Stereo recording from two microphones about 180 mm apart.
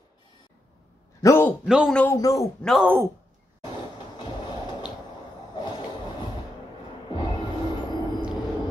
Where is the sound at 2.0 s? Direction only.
15° left (ahead or behind).